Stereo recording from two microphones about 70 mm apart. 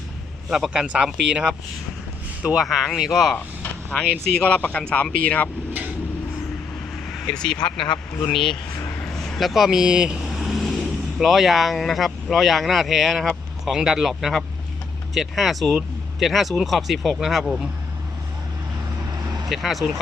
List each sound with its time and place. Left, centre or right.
0.7 s speech: centre
2.6 s speech: centre
3.3 s vehicle: left
3.9 s speech: centre
7.3 s speech: centre
19.5 s speech: centre